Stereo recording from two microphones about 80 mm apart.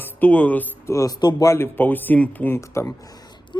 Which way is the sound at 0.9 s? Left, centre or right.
Left.